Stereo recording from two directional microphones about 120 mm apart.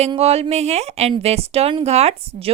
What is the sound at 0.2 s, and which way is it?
A woman's voice, 60° right (ahead or behind).